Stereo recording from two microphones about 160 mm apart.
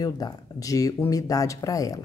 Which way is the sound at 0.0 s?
20° left (ahead or behind).